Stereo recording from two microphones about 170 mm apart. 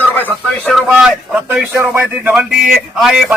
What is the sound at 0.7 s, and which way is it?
A man's voice, centre (ahead or behind).